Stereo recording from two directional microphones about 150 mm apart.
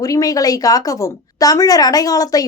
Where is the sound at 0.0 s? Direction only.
25° left (ahead or behind).